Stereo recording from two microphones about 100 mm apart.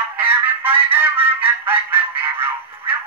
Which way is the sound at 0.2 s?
20° right (ahead or behind).